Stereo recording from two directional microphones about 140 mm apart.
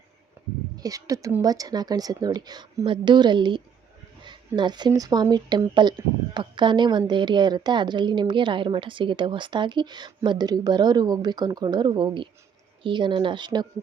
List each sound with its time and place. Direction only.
0.8 s a woman's voice: 25° right (ahead or behind)